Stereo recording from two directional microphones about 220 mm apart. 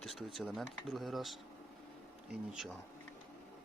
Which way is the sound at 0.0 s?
Centre (ahead or behind).